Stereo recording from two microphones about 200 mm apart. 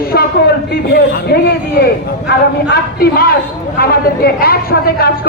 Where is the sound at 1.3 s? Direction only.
50° left (ahead or behind).